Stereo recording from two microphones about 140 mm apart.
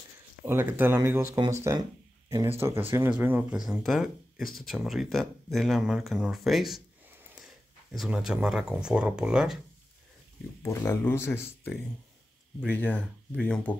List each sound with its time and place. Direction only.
0.5 s speech: 15° right (ahead or behind)
2.2 s a sound: 20° right (ahead or behind)
2.6 s speech: 15° right (ahead or behind); by 6.8 s centre (ahead or behind)
7.9 s speech: centre (ahead or behind)
10.6 s speech: 20° left (ahead or behind)